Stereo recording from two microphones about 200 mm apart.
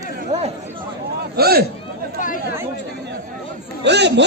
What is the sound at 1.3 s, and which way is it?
Speech, 50° right (ahead or behind).